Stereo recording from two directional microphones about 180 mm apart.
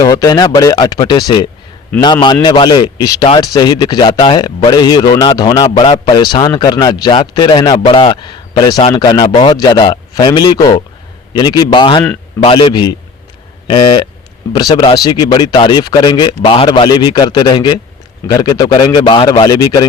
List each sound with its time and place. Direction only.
0.0 s a man's voice: 20° left (ahead or behind)